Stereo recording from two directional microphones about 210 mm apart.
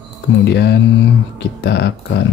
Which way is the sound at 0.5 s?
55° left (ahead or behind).